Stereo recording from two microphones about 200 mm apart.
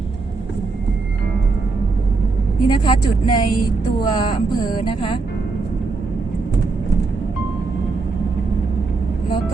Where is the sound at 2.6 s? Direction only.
25° left (ahead or behind).